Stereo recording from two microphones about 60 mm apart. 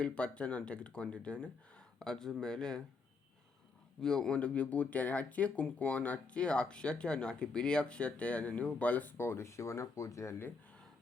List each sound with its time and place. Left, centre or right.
0.0 s speech: centre
4.0 s speech: centre
9.1 s speech: left